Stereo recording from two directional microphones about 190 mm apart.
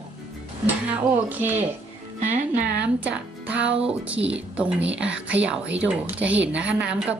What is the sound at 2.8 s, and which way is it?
A woman's voice, 5° right (ahead or behind).